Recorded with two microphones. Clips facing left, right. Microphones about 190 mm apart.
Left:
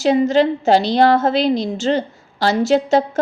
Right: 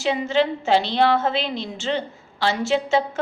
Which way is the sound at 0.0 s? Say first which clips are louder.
Left 7 dB; 40° left (ahead or behind).